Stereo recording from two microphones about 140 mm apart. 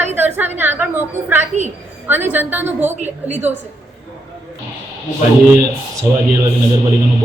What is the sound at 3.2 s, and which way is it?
Speech, 55° right (ahead or behind).